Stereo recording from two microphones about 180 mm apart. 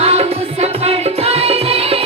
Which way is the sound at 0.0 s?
35° right (ahead or behind).